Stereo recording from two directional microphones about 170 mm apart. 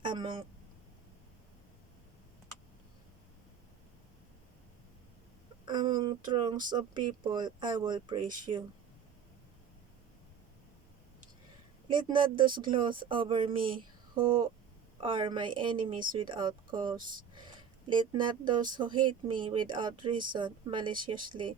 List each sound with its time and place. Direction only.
0.0 s a sound: 30° right (ahead or behind)
5.6 s speech: 25° right (ahead or behind)
11.9 s speech: 25° right (ahead or behind)